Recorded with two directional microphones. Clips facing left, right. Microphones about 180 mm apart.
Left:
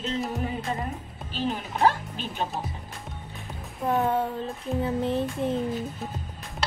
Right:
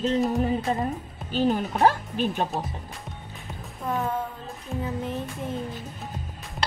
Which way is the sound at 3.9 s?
35° left (ahead or behind).